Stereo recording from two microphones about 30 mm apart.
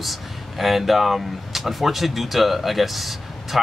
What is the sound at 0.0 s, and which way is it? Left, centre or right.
Speech, centre.